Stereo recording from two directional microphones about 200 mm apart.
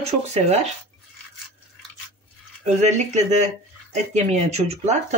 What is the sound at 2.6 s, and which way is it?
Speech, 35° right (ahead or behind).